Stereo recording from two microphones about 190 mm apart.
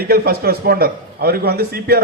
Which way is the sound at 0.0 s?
55° right (ahead or behind).